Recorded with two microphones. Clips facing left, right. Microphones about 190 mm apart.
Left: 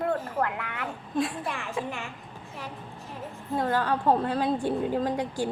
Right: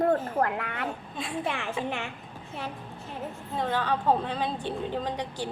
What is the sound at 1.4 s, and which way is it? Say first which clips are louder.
Speech: right 2 dB; 70° right (ahead or behind).